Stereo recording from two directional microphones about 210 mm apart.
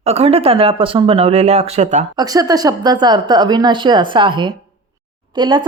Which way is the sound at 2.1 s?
15° right (ahead or behind).